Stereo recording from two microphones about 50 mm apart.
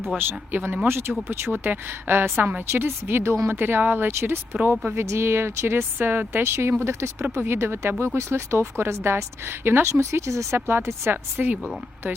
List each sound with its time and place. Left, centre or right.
0.2 s a woman's voice: right
1.5 s a woman's voice: right
4.7 s a woman's voice: right
4.9 s a woman's voice: right
10.7 s a woman's voice: right
11.3 s a woman's voice: right